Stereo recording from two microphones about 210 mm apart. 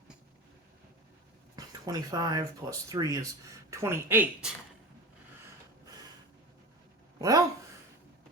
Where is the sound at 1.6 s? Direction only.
15° right (ahead or behind).